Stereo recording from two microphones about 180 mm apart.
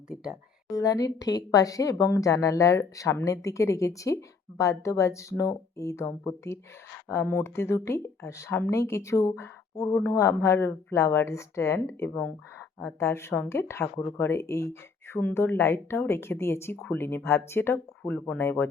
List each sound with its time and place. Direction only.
0.7 s speech: 20° left (ahead or behind)